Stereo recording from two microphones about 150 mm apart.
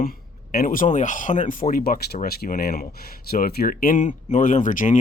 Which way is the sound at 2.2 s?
90° left.